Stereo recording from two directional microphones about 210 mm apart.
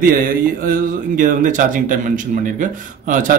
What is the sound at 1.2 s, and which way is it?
Speech, 40° right (ahead or behind).